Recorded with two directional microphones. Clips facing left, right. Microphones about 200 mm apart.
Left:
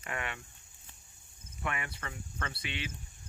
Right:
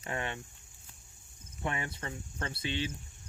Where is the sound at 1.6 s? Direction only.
30° right (ahead or behind).